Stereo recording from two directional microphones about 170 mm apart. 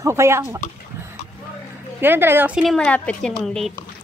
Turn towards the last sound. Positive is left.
turn(degrees=0)  # may be behind; listen again after turning